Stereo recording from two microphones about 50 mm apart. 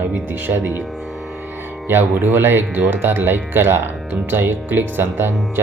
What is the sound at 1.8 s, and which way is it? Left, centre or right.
Speech, right.